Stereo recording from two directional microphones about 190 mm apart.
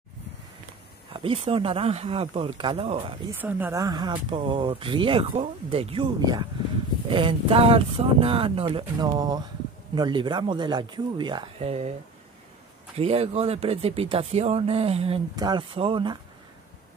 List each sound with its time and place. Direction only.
1.1 s speech: 30° right (ahead or behind)
3.3 s speech: 10° right (ahead or behind); by 11.9 s 30° right (ahead or behind)
12.9 s speech: 30° right (ahead or behind)